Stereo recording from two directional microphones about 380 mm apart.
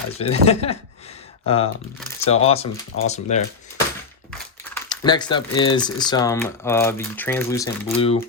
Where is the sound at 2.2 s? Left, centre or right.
Centre.